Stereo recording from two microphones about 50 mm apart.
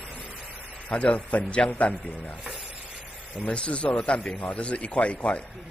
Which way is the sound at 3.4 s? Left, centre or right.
Left.